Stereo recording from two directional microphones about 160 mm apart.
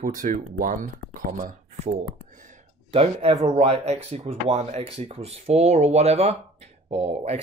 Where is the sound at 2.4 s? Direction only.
45° right (ahead or behind).